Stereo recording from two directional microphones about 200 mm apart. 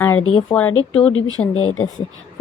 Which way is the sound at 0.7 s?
90° left.